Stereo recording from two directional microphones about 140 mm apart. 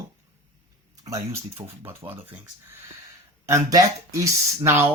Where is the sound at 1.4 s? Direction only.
45° right (ahead or behind).